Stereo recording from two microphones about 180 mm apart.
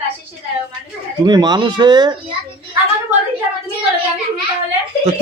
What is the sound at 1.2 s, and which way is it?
Speech, 25° right (ahead or behind).